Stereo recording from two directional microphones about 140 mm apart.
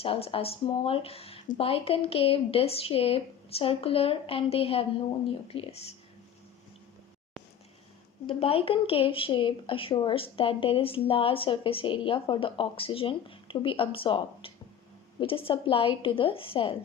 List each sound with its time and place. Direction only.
0.0 s speech: 45° left (ahead or behind)
8.3 s a woman's voice: 45° left (ahead or behind)